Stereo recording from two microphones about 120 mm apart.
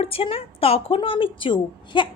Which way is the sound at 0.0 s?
50° left (ahead or behind).